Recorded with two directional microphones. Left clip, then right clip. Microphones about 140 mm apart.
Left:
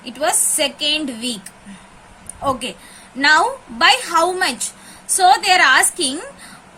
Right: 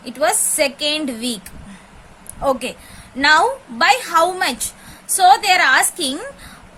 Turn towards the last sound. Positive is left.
turn(degrees=-25)  # may be behind; listen again after turning